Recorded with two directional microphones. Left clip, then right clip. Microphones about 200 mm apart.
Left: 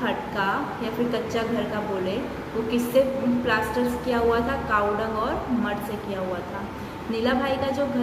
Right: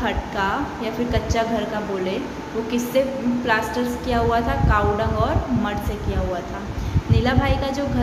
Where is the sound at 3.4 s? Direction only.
25° right (ahead or behind).